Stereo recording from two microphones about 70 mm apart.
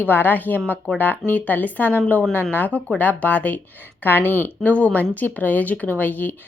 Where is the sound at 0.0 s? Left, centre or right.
Left.